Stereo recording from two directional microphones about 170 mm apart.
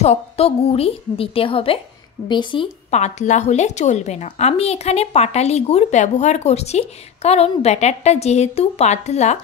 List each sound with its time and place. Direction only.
0.0 s a woman's voice: 35° left (ahead or behind)
2.9 s a woman's voice: 40° left (ahead or behind)